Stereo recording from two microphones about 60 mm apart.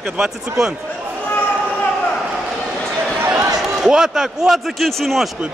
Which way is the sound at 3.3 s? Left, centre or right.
Right.